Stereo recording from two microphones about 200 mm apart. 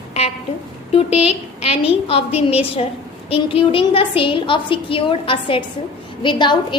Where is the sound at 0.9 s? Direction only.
30° left (ahead or behind).